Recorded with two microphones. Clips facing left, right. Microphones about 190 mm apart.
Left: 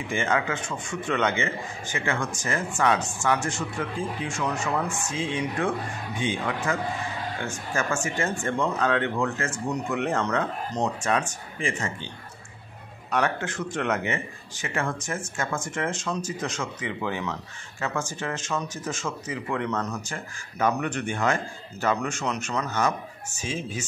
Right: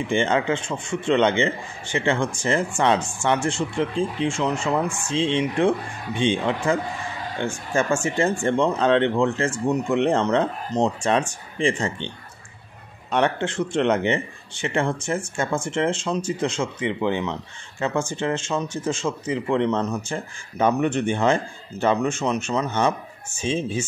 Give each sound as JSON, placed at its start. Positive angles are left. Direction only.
{"t": 0.1, "sound": "a man's voice", "side_deg": -30}
{"t": 13.1, "sound": "a man's voice", "side_deg": -25}